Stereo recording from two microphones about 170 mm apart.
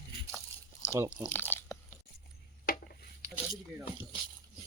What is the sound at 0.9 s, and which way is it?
Speech, 15° right (ahead or behind).